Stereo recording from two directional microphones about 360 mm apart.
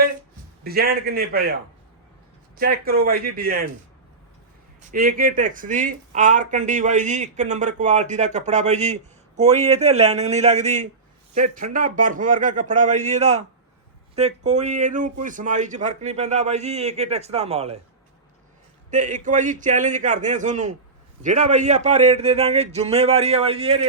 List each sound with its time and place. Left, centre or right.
0.6 s speech: right
2.6 s speech: right
4.8 s speech: right
18.9 s speech: right